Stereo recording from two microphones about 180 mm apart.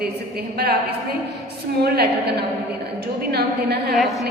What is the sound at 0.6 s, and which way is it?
Speech, 60° right (ahead or behind).